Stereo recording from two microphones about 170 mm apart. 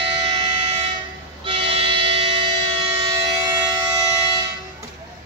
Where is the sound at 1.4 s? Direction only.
30° right (ahead or behind).